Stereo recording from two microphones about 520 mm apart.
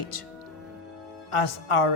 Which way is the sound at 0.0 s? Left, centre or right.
Left.